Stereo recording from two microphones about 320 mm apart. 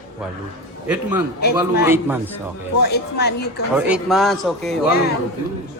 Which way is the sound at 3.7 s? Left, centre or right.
Centre.